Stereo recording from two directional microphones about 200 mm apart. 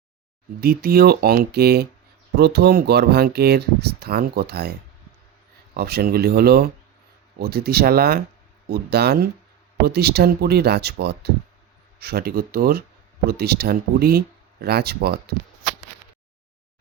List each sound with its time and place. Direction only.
0.6 s speech: 50° right (ahead or behind)